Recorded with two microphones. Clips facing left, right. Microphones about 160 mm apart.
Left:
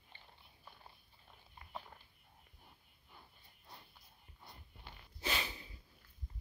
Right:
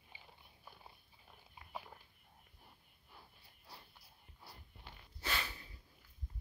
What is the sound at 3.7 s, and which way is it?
Walk, centre (ahead or behind).